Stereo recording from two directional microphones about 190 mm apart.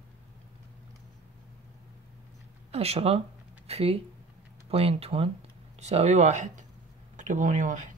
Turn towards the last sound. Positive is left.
turn(degrees=-40)  # may be behind; listen again after turning